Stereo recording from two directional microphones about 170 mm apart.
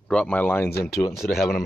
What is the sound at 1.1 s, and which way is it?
Speech, centre (ahead or behind).